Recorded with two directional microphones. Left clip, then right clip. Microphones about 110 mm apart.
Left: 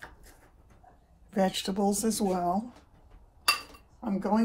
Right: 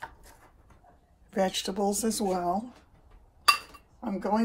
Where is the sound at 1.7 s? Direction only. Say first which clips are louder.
Even; 20° left (ahead or behind).